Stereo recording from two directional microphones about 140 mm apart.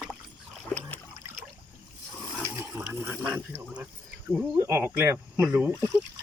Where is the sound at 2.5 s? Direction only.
15° right (ahead or behind).